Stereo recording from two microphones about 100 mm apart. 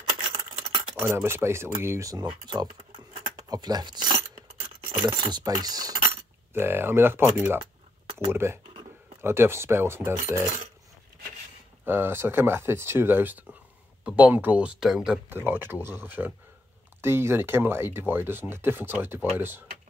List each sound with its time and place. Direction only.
1.0 s speech: 25° right (ahead or behind)
2.4 s speech: 45° right (ahead or behind)
2.9 s a sound: 65° right (ahead or behind)
3.3 s speech: 40° right (ahead or behind)
6.5 s speech: 25° right (ahead or behind)
11.8 s speech: 20° right (ahead or behind); by 15.1 s 5° right (ahead or behind)
15.2 s speech: 20° right (ahead or behind)